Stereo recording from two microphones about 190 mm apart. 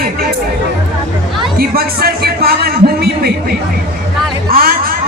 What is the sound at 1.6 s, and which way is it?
A man's voice, 55° right (ahead or behind).